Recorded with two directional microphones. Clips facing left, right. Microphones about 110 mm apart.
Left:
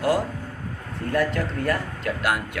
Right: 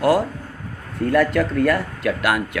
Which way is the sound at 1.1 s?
85° right.